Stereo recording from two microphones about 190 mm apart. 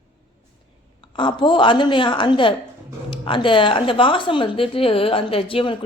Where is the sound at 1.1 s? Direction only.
25° left (ahead or behind).